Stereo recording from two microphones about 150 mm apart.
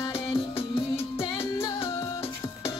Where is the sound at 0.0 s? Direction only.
20° left (ahead or behind).